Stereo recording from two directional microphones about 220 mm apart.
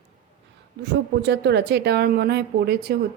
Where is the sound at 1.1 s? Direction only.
50° right (ahead or behind).